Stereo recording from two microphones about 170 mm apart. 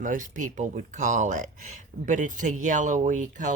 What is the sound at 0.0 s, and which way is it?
Speech, 50° right (ahead or behind).